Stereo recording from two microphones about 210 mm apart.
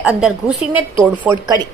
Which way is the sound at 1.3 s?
15° right (ahead or behind).